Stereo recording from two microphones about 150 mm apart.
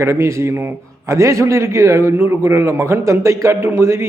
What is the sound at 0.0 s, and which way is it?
A man's voice, 15° right (ahead or behind).